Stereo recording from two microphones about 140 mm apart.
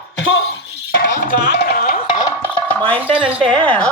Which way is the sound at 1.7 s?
90° left.